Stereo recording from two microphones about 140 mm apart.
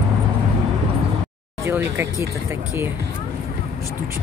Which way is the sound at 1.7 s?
15° right (ahead or behind).